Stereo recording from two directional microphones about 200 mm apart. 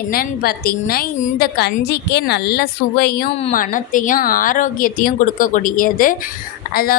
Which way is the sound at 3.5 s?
45° left (ahead or behind).